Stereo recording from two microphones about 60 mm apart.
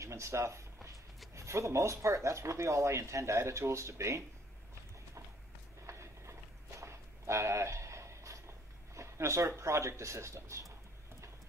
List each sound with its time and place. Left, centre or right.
0.0 s speech: right
5.9 s walk: right